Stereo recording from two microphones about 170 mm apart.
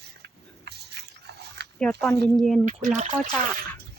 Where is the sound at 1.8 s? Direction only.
5° left (ahead or behind).